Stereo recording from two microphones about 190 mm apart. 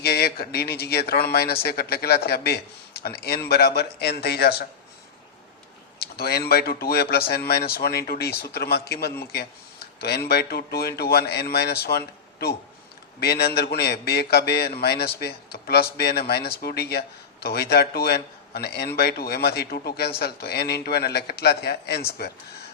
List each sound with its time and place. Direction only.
0.0 s a man's voice: 55° left (ahead or behind)
6.0 s a man's voice: 55° left (ahead or behind)